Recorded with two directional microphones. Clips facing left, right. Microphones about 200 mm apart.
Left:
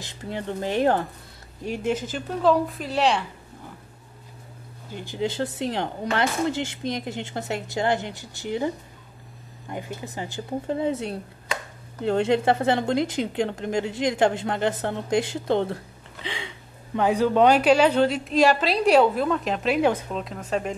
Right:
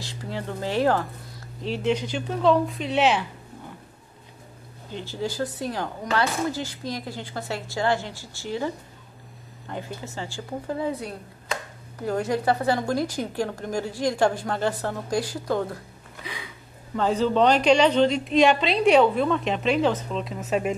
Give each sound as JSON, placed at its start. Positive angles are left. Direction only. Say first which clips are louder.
{"t": 0.0, "sound": "a woman's voice", "louder": "left 1 dB", "side_deg": 20}
{"t": 2.0, "sound": "a woman's voice", "louder": "right 1 dB", "side_deg": 5}
{"t": 4.9, "sound": "a woman's voice", "louder": "left 2 dB", "side_deg": 15}
{"t": 17.0, "sound": "a woman's voice", "louder": "left 2 dB", "side_deg": 10}
{"t": 20.3, "sound": "speech", "louder": "right 3 dB", "side_deg": -5}